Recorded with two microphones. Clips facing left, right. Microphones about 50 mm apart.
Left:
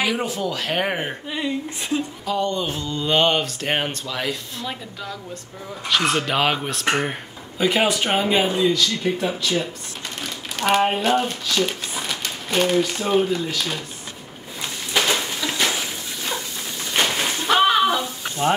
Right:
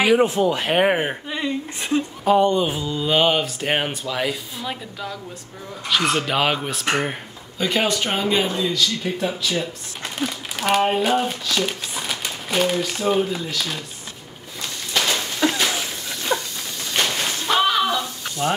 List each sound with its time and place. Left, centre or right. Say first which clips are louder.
0.0 s speech: right 7 dB; right
1.3 s speech: even; centre
2.2 s speech: right 9 dB; right; by 13.8 s centre
14.6 s a sound: left 1 dB; centre
16.9 s snake: left 1 dB; centre